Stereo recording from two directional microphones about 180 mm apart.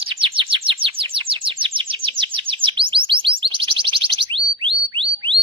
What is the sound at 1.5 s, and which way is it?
Bird, 30° right (ahead or behind).